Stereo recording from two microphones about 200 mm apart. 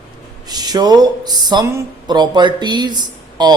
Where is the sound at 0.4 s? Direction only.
20° right (ahead or behind).